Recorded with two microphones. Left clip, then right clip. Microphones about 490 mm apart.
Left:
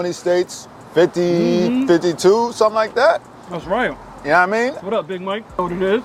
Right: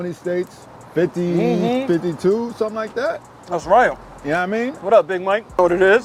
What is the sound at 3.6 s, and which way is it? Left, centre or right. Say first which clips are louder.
Speech: right 6 dB; right.